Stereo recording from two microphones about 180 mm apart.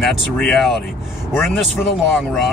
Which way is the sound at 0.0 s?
Centre (ahead or behind).